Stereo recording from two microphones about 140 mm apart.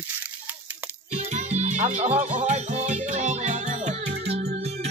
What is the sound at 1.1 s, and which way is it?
Music, 55° right (ahead or behind).